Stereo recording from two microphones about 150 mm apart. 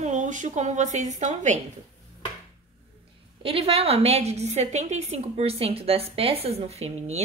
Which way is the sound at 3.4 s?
40° right (ahead or behind).